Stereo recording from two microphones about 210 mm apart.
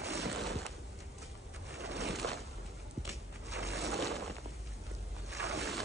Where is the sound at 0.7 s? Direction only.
Centre (ahead or behind).